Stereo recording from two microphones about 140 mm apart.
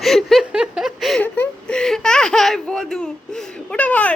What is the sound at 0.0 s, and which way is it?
Chuckle, centre (ahead or behind).